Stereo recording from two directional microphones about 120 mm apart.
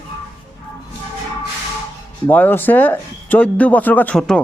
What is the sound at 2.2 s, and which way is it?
Speech, 15° left (ahead or behind).